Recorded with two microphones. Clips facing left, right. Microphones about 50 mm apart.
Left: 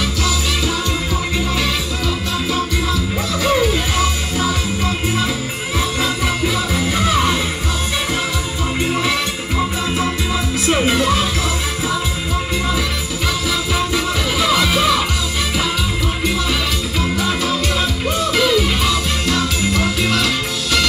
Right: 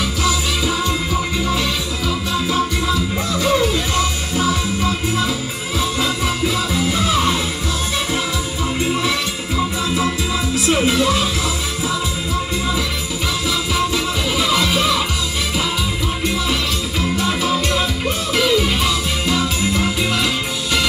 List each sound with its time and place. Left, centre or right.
3.7 s music: centre
5.9 s music: centre
10.7 s music: centre
13.5 s music: centre
17.2 s music: centre